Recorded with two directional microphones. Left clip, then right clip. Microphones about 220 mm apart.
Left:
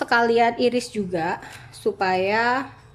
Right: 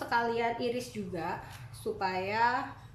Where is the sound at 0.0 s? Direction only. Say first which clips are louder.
Left 12 dB; 45° left (ahead or behind).